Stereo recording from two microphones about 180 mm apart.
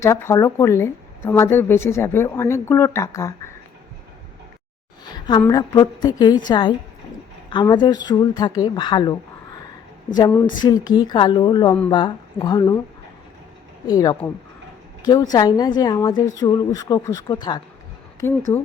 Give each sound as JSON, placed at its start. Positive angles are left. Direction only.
{"t": 0.0, "sound": "speech", "side_deg": 15}
{"t": 5.0, "sound": "a sound", "side_deg": 25}
{"t": 5.5, "sound": "a woman's voice", "side_deg": 20}
{"t": 10.2, "sound": "a woman's voice", "side_deg": 20}
{"t": 13.8, "sound": "a woman's voice", "side_deg": 20}